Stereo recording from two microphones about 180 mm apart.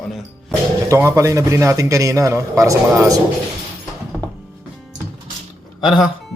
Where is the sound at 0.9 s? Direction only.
15° right (ahead or behind).